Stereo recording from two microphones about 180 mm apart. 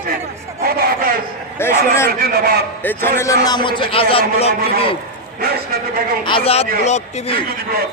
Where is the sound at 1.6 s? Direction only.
15° left (ahead or behind); by 4.9 s 30° left (ahead or behind).